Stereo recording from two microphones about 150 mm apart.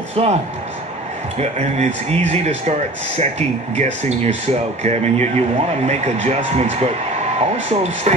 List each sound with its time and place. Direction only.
0.1 s a man's voice: 45° right (ahead or behind)
1.4 s a man's voice: 50° right (ahead or behind)